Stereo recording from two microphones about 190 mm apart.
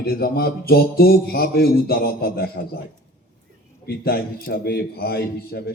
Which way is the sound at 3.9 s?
55° left (ahead or behind).